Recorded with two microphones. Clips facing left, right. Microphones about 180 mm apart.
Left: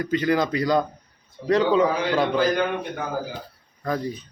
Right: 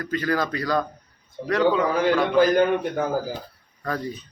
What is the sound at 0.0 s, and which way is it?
Speech, 20° left (ahead or behind).